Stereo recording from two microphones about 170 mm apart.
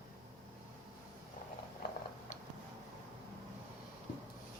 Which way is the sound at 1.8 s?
60° left (ahead or behind).